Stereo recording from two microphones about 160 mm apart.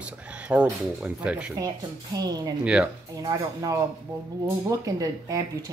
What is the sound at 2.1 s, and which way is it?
Speech, 25° right (ahead or behind).